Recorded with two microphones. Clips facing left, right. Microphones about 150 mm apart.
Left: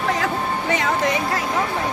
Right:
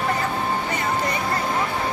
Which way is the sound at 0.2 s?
90° left.